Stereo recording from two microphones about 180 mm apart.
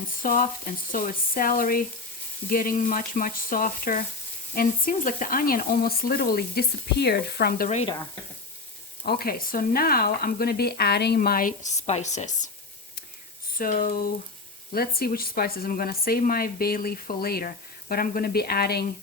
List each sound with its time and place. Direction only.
0.2 s speech: 50° left (ahead or behind)
9.0 s speech: 60° left (ahead or behind); by 12.5 s 40° left (ahead or behind)
13.6 s speech: 50° left (ahead or behind)